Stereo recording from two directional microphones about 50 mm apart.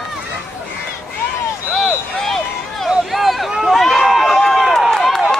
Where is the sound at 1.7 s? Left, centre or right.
Centre.